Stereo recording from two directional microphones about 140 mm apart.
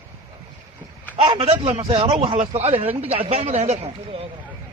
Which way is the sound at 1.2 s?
40° right (ahead or behind).